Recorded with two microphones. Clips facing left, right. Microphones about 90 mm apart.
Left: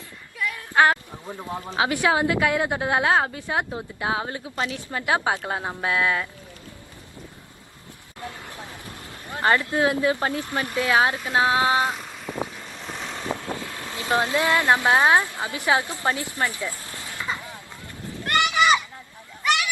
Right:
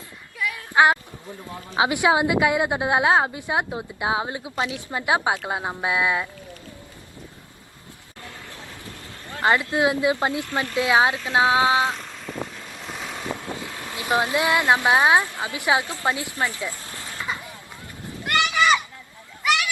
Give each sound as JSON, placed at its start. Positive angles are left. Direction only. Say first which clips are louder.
{"t": 0.4, "sound": "a sound", "louder": "right 1 dB", "side_deg": -15}
{"t": 1.5, "sound": "speech", "louder": "left 8 dB", "side_deg": 25}
{"t": 1.7, "sound": "a woman's voice", "louder": "right 2 dB", "side_deg": -20}
{"t": 9.4, "sound": "a woman's voice", "louder": "right 1 dB", "side_deg": -15}
{"t": 11.8, "sound": "vehicle", "louder": "right 1 dB", "side_deg": 5}
{"t": 13.6, "sound": "a woman's voice", "louder": "even", "side_deg": -15}
{"t": 17.0, "sound": "a sound", "louder": "even", "side_deg": 20}
{"t": 18.3, "sound": "children playing", "louder": "even", "side_deg": 15}